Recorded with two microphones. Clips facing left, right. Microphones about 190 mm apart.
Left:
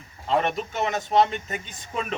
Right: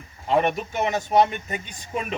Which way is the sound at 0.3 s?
15° right (ahead or behind).